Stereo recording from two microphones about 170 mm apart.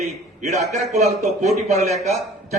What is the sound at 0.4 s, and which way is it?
A man's voice, 40° right (ahead or behind).